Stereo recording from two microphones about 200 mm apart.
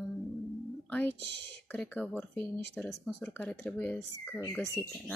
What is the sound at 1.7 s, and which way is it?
Speech, 5° left (ahead or behind).